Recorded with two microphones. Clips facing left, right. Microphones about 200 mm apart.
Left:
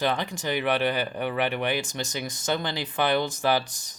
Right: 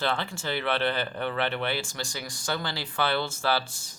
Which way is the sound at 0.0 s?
15° left (ahead or behind).